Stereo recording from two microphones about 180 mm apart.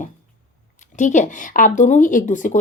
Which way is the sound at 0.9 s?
45° left (ahead or behind).